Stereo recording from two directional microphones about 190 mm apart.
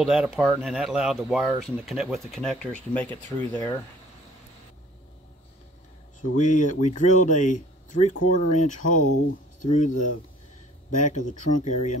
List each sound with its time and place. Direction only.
0.0 s speech: centre (ahead or behind)
6.3 s speech: 40° left (ahead or behind)